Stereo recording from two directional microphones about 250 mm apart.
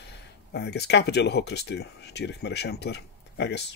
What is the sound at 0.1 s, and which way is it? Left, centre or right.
Speech, left.